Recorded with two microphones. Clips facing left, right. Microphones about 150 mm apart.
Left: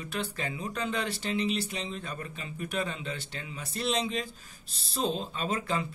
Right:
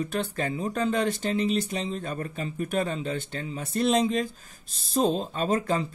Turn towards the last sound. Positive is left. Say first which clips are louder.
# right 6 dB
turn(degrees=-40)  # may be behind; listen again after turning